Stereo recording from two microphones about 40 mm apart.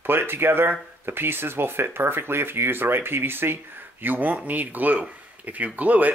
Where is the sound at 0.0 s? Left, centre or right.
Right.